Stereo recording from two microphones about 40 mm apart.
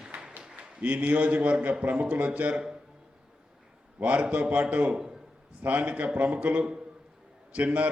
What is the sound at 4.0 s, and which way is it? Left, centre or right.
Speech, right.